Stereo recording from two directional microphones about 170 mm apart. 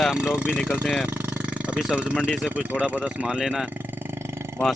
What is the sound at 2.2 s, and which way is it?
Speech, 5° right (ahead or behind).